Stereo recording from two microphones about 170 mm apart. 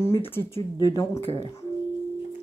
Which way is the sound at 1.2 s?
35° left (ahead or behind).